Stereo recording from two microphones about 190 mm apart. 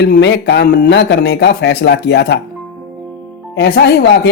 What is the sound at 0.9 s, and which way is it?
Speech, 65° left (ahead or behind).